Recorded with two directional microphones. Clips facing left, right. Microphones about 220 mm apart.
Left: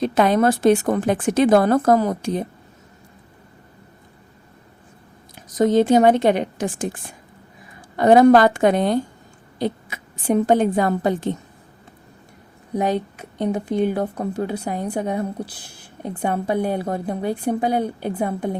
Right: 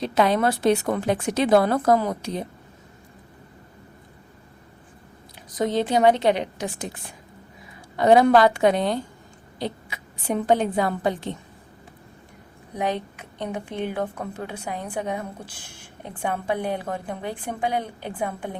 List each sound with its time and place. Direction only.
0.0 s a woman's voice: 50° left (ahead or behind)
5.5 s a woman's voice: 45° left (ahead or behind)
12.8 s a woman's voice: 45° left (ahead or behind)